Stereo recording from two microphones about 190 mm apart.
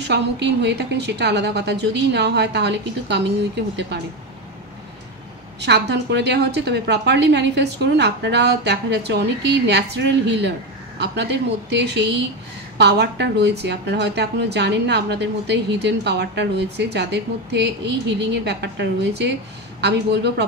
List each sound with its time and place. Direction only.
0.0 s speech: 65° right (ahead or behind)
5.6 s speech: 65° right (ahead or behind)